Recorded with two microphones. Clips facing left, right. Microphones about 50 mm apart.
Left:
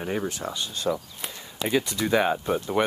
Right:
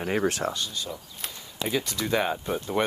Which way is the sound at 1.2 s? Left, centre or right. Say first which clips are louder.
Left 2 dB; centre.